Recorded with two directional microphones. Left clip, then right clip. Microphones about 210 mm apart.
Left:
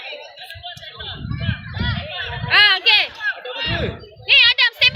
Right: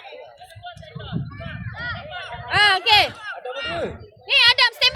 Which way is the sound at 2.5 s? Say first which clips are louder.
Left 3 dB; 30° right (ahead or behind).